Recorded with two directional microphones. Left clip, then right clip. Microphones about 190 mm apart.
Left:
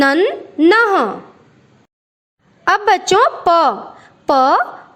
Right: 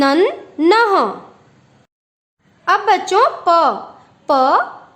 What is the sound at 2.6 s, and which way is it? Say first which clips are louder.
A woman's voice: left 1 dB; 30° left (ahead or behind).